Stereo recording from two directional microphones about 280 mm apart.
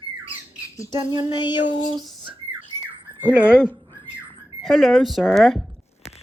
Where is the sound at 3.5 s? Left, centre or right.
Centre.